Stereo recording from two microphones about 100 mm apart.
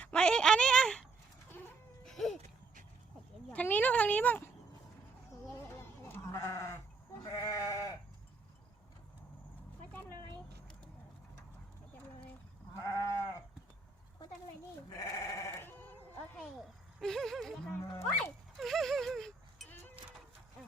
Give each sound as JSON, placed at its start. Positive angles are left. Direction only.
{"t": 0.0, "sound": "a sound", "side_deg": 10}
{"t": 1.5, "sound": "cat", "side_deg": 20}
{"t": 2.0, "sound": "a sound", "side_deg": 0}
{"t": 3.5, "sound": "a sound", "side_deg": 15}
{"t": 6.1, "sound": "goat", "side_deg": 25}
{"t": 7.3, "sound": "goat", "side_deg": 35}
{"t": 12.8, "sound": "livestock", "side_deg": 30}
{"t": 14.8, "sound": "sheep", "side_deg": 35}
{"t": 15.5, "sound": "sheep", "side_deg": 20}
{"t": 17.0, "sound": "a sound", "side_deg": 5}
{"t": 17.7, "sound": "speech", "side_deg": 25}
{"t": 18.2, "sound": "dog", "side_deg": 5}